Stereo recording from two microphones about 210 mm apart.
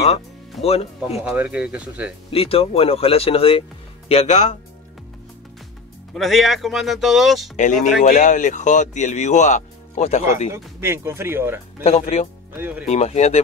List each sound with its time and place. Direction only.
0.7 s speech: 30° left (ahead or behind)
1.2 s speech: 10° right (ahead or behind)
2.3 s speech: 25° left (ahead or behind)
6.1 s speech: centre (ahead or behind)
7.5 s speech: 35° left (ahead or behind)
10.5 s speech: 10° right (ahead or behind)
11.8 s speech: 30° left (ahead or behind)
12.5 s speech: 10° right (ahead or behind)
12.8 s speech: 30° left (ahead or behind)